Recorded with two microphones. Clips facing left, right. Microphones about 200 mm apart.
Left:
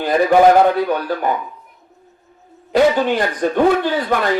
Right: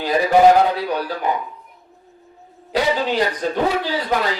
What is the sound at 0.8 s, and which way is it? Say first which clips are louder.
Speech: left 4 dB; 50° left (ahead or behind).